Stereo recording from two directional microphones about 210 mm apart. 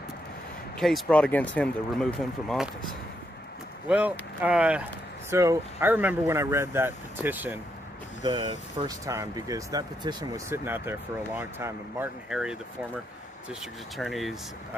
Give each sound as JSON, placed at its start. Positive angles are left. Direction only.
{"t": 0.8, "sound": "speech", "side_deg": 0}
{"t": 3.8, "sound": "speech", "side_deg": -5}
{"t": 8.2, "sound": "speech", "side_deg": -20}